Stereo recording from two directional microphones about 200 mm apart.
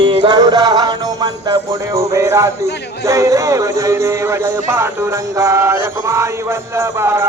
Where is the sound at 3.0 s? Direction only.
15° right (ahead or behind).